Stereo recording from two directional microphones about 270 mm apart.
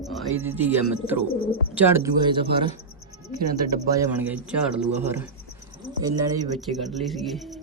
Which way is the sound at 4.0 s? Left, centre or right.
Centre.